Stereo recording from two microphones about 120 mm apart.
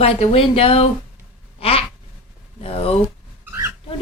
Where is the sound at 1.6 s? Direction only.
55° left (ahead or behind).